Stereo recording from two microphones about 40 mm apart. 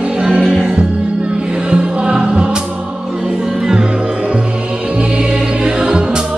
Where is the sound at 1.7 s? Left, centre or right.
Centre.